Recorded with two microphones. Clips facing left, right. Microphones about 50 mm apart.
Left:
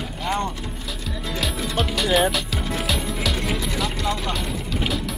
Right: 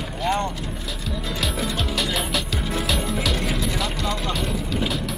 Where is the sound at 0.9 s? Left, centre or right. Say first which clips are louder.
Even; centre.